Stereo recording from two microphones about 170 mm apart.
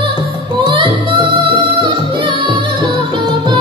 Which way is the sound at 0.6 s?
30° right (ahead or behind).